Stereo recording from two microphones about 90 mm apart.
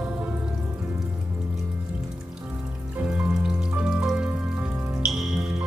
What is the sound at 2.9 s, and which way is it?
Music, 15° right (ahead or behind).